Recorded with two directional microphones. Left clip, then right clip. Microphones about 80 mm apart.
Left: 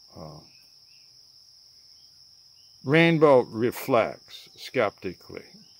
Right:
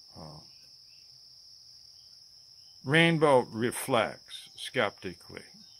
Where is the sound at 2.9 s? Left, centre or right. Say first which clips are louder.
Left 5 dB; centre.